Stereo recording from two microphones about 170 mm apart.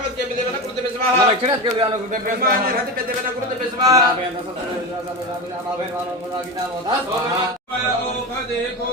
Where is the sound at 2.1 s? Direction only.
55° right (ahead or behind).